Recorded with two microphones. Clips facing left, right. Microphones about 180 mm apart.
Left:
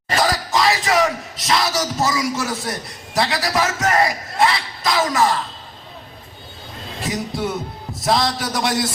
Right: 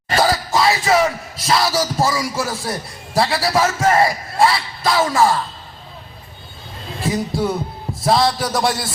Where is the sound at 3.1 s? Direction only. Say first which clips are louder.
Right 3 dB; 30° right (ahead or behind).